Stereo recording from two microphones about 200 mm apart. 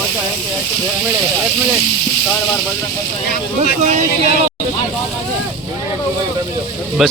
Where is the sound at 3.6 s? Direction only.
35° right (ahead or behind).